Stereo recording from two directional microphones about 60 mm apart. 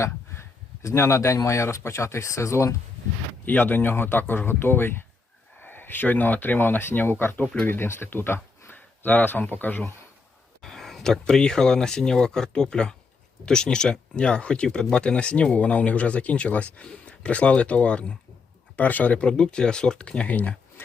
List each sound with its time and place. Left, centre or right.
0.0 s a sound: left
1.5 s speech: left
3.4 s speech: left
10.6 s speech: centre; by 20.6 s left